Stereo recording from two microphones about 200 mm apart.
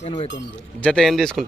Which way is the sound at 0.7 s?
5° left (ahead or behind).